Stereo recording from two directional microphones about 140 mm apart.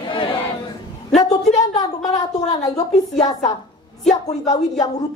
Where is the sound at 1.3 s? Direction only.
25° left (ahead or behind).